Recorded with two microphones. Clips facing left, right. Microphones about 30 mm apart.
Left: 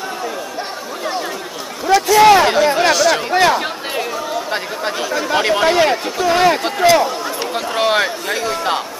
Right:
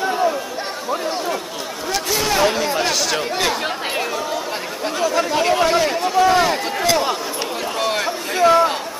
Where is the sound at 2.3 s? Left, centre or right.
Left.